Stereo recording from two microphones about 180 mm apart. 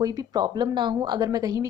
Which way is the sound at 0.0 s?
20° right (ahead or behind).